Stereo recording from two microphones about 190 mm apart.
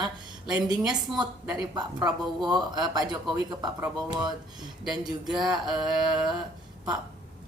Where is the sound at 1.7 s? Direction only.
20° right (ahead or behind).